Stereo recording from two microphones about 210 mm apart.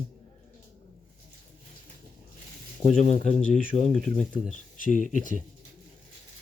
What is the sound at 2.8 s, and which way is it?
Speech, 30° left (ahead or behind).